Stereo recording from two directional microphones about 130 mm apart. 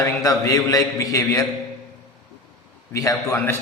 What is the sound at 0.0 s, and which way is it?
A man's voice, 25° left (ahead or behind).